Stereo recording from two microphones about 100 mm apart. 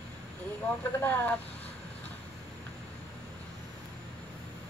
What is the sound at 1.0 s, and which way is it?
Speech, 20° left (ahead or behind).